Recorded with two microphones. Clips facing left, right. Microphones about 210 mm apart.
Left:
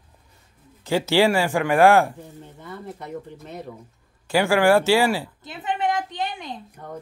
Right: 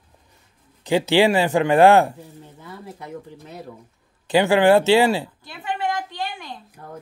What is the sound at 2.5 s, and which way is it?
Speech, 5° right (ahead or behind).